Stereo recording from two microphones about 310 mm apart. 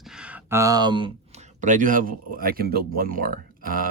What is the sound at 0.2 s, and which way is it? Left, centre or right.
Speech, centre.